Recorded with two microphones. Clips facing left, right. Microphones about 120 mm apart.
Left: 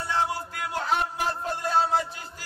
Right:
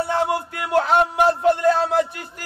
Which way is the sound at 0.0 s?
60° right (ahead or behind).